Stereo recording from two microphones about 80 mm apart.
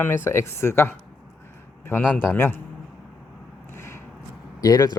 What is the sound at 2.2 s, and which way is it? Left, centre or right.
Speech, left.